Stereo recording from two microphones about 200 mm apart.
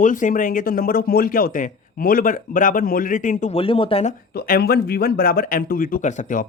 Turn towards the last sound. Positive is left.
turn(degrees=40)  # may be behind; listen again after turning